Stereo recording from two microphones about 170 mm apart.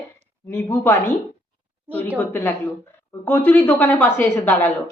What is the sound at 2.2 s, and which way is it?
A woman's voice, 10° left (ahead or behind).